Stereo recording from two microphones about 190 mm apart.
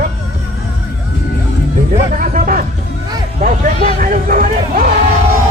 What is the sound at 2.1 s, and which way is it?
Speech, 45° right (ahead or behind).